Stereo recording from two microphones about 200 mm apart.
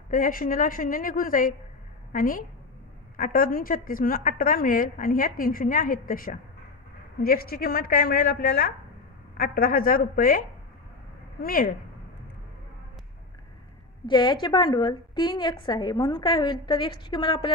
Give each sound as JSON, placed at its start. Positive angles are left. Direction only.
{"t": 0.1, "sound": "a woman's voice", "side_deg": 45}
{"t": 11.4, "sound": "a woman's voice", "side_deg": 45}
{"t": 14.0, "sound": "a woman's voice", "side_deg": 25}